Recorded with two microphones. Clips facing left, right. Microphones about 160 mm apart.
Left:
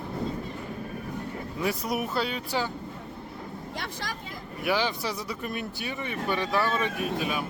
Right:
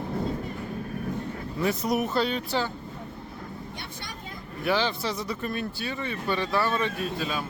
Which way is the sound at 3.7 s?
90° left.